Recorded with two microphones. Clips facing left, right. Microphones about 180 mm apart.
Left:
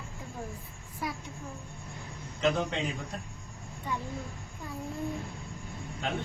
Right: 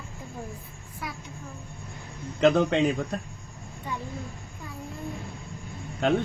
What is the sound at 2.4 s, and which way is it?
Speech, 65° right (ahead or behind).